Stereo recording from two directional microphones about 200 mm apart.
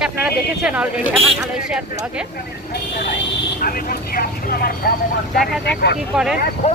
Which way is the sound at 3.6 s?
45° left (ahead or behind).